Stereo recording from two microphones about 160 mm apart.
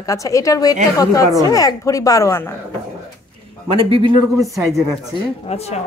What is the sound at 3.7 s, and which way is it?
Speech, 35° right (ahead or behind).